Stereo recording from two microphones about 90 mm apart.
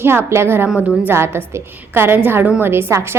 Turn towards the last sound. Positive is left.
turn(degrees=-30)  # may be behind; listen again after turning